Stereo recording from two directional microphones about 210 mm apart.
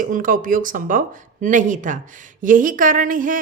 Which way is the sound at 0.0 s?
40° right (ahead or behind).